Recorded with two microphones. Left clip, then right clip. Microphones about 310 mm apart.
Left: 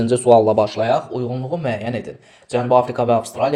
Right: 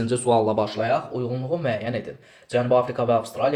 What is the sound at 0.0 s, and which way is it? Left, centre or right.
Speech, centre.